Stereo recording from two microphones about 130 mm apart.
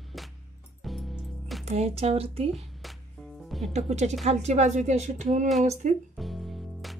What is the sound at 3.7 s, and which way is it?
Speech, 60° right (ahead or behind).